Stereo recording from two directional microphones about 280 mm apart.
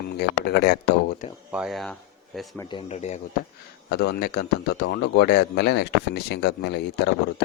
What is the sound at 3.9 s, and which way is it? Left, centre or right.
Speech, left.